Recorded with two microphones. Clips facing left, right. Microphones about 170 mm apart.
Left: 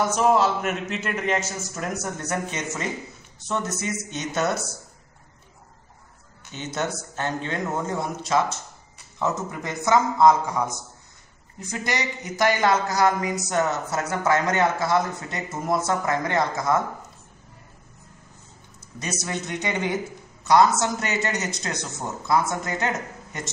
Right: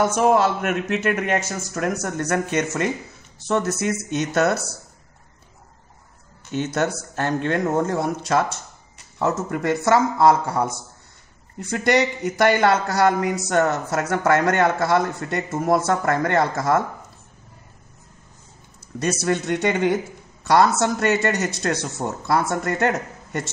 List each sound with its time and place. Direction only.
0.0 s speech: 50° right (ahead or behind)
6.5 s speech: 55° right (ahead or behind)
11.7 s speech: 60° right (ahead or behind)
18.9 s speech: 60° right (ahead or behind)